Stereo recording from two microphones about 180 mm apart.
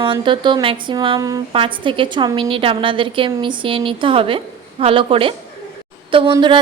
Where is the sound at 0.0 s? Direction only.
25° right (ahead or behind).